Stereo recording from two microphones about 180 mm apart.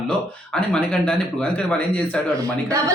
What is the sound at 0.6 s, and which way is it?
A man's voice, 5° left (ahead or behind).